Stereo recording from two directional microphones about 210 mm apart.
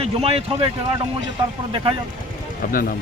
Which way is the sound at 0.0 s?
30° right (ahead or behind).